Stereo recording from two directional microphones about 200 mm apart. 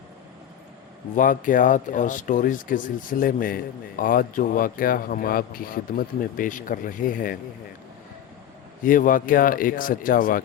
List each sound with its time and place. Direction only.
1.1 s speech: 40° left (ahead or behind)
8.8 s speech: 40° left (ahead or behind)